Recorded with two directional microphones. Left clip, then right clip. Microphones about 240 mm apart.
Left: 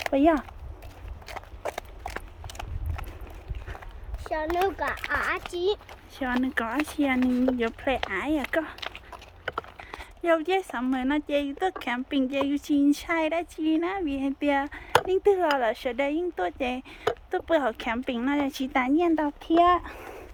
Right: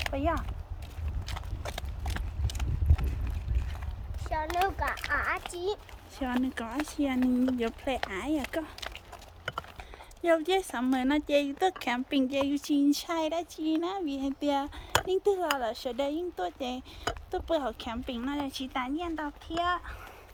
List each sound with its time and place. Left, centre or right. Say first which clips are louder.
0.0 s speech: left 9 dB; left
1.3 s clip-clop: left 6 dB; centre
4.8 s speech: left 3 dB; left
6.3 s speech: left 6 dB; centre
10.2 s a woman's voice: left 2 dB; centre; by 19.2 s left
19.2 s speech: left 9 dB; left
19.9 s a sound: left 5 dB; left